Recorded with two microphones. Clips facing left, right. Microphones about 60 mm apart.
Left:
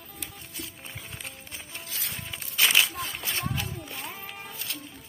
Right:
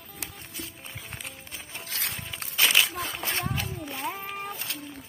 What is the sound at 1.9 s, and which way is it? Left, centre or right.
Music, right.